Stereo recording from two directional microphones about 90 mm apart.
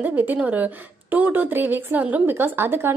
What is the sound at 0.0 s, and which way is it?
A woman's voice, 20° right (ahead or behind).